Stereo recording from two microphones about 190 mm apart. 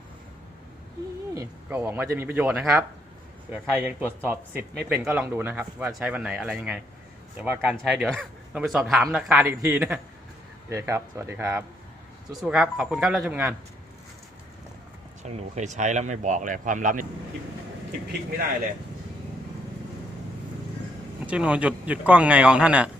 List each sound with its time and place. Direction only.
1.3 s a man's voice: 15° right (ahead or behind)
15.2 s speech: 40° right (ahead or behind)
21.2 s speech: 5° right (ahead or behind)